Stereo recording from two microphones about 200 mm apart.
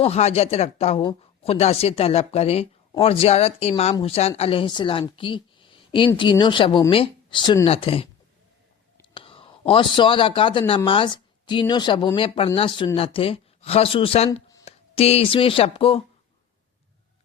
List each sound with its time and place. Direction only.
0.0 s speech: 30° left (ahead or behind)
9.1 s speech: 25° left (ahead or behind)